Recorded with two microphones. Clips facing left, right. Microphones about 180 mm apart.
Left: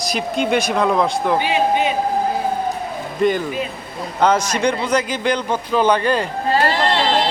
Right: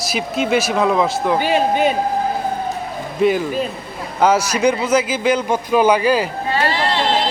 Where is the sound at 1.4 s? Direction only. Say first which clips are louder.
Right 3 dB; 45° right (ahead or behind).